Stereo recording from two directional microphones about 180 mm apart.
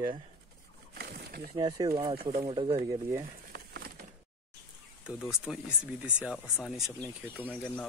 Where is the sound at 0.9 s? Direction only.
65° right (ahead or behind).